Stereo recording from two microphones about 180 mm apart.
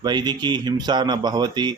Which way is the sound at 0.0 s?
25° right (ahead or behind).